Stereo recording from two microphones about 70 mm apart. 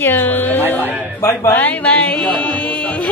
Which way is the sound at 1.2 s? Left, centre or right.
Left.